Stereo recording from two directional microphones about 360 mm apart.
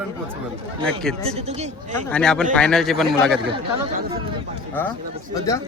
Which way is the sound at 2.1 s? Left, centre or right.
Centre.